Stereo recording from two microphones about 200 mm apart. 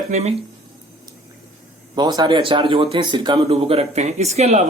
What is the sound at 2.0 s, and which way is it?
Speech, 20° right (ahead or behind).